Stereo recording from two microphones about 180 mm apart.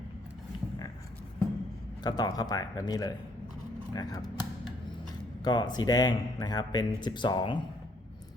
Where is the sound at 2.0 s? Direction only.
20° left (ahead or behind).